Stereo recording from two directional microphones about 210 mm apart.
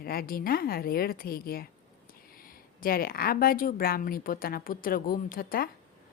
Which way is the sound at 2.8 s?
45° left (ahead or behind).